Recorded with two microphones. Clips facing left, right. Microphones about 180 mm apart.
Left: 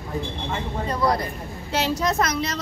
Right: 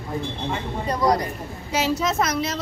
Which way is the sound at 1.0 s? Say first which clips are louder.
Right 2 dB; 15° right (ahead or behind).